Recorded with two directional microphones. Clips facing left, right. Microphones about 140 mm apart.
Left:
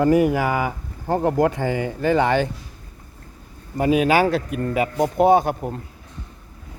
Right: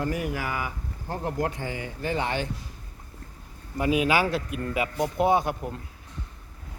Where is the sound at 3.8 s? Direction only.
45° left (ahead or behind).